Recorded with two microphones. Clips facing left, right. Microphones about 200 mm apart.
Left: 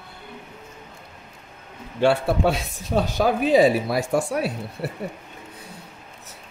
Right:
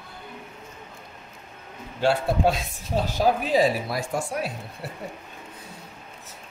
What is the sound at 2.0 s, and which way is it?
Speech, 65° left (ahead or behind).